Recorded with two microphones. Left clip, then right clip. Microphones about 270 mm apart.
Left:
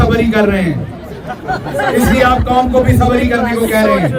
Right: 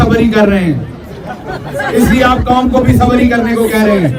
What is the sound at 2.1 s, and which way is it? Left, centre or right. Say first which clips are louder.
A man's voice: right 1 dB; centre.